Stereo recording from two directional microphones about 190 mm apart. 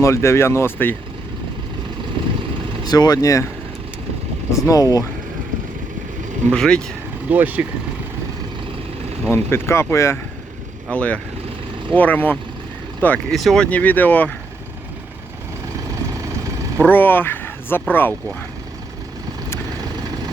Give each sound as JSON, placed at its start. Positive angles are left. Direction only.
{"t": 0.0, "sound": "speech", "side_deg": 15}
{"t": 2.2, "sound": "vehicle", "side_deg": -25}
{"t": 2.8, "sound": "speech", "side_deg": 20}
{"t": 4.5, "sound": "speech", "side_deg": 15}
{"t": 6.5, "sound": "speech", "side_deg": 5}
{"t": 7.3, "sound": "speech", "side_deg": -10}
{"t": 9.2, "sound": "speech", "side_deg": 10}
{"t": 16.8, "sound": "speech", "side_deg": 10}